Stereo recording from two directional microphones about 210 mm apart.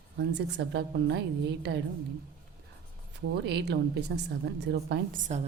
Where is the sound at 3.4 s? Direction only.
55° right (ahead or behind).